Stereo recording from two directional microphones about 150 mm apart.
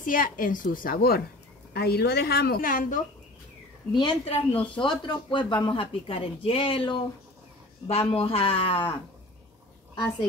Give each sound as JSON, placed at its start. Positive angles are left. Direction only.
{"t": 0.0, "sound": "a woman's voice", "side_deg": 65}
{"t": 3.9, "sound": "speech", "side_deg": 30}